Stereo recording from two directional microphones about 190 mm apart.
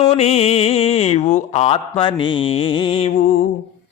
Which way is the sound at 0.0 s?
35° left (ahead or behind).